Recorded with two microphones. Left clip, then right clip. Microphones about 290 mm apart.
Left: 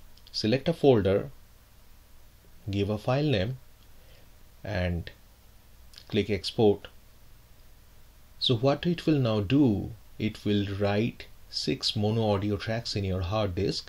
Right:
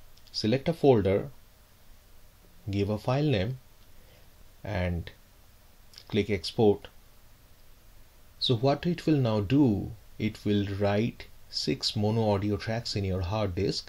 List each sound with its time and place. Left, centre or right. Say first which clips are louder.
0.3 s speech: left 1 dB; centre
2.7 s speech: left 1 dB; centre
4.6 s speech: left 1 dB; centre
8.4 s speech: left 1 dB; centre